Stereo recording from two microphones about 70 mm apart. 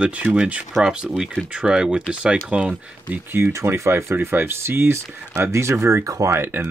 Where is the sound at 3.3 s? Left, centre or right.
Right.